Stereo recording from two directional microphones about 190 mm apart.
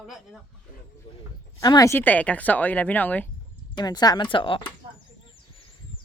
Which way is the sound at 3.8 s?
20° left (ahead or behind).